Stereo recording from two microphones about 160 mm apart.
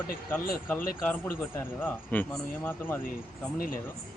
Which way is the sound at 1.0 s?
10° left (ahead or behind).